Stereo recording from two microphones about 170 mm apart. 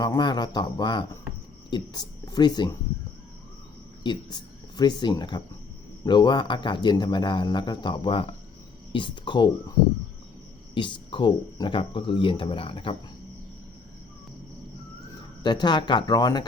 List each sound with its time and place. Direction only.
0.0 s speech: 25° left (ahead or behind)
4.0 s speech: 30° left (ahead or behind)
10.8 s speech: 30° left (ahead or behind)
15.4 s speech: 25° left (ahead or behind)